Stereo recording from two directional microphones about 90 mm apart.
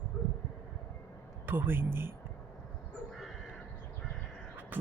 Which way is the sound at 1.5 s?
25° right (ahead or behind).